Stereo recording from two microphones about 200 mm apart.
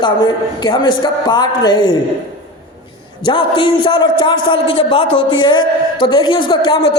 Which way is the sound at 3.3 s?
25° left (ahead or behind).